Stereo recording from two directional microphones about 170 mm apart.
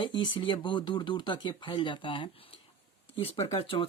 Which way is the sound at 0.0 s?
30° left (ahead or behind).